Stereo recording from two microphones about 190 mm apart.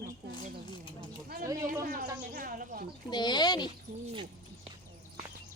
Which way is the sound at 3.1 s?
20° left (ahead or behind).